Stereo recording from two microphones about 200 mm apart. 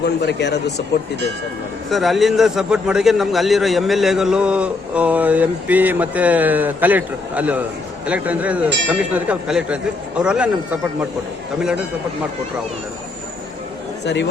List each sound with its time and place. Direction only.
0.0 s speech: 55° left (ahead or behind)
1.9 s a man's voice: centre (ahead or behind)
14.0 s speech: 60° left (ahead or behind)